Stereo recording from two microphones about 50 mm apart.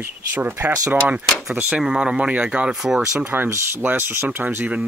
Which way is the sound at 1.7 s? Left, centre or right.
Centre.